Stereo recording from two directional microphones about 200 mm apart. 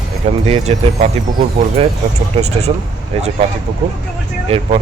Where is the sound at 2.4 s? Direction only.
35° right (ahead or behind).